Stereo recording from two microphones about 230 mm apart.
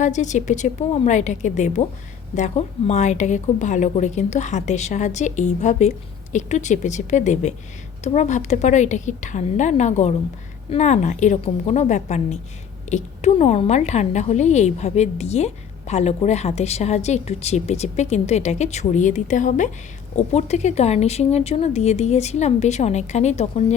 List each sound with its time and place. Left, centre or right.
0.0 s a woman's voice: left